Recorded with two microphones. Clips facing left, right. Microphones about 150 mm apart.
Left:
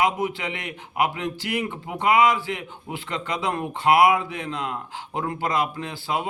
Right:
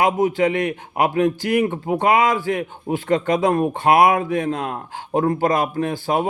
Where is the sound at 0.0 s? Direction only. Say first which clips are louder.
Right 7 dB; 45° right (ahead or behind).